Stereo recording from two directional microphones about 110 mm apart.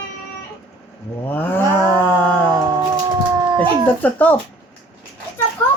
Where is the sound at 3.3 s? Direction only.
35° right (ahead or behind).